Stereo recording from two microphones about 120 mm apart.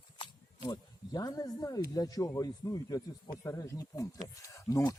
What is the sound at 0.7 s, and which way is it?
Speech, 30° left (ahead or behind).